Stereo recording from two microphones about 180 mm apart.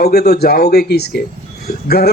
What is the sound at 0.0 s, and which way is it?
Speech, 60° left (ahead or behind).